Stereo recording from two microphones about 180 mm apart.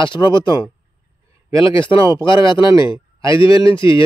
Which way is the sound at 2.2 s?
25° left (ahead or behind).